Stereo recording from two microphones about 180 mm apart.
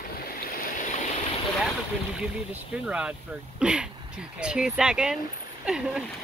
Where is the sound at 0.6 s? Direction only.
45° left (ahead or behind).